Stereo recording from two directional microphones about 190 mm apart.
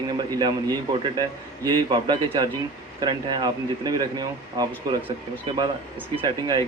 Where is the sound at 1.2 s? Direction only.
20° right (ahead or behind).